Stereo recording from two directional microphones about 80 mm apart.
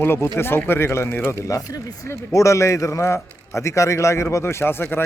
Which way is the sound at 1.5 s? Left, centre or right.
Left.